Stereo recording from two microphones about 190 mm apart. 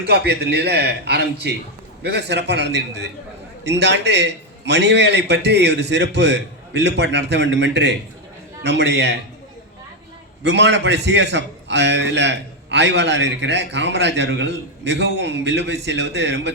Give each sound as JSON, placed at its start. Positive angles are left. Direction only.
{"t": 0.0, "sound": "a man's voice", "side_deg": -60}
{"t": 10.4, "sound": "a man's voice", "side_deg": -65}